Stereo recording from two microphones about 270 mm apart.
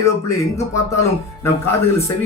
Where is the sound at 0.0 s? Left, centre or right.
Centre.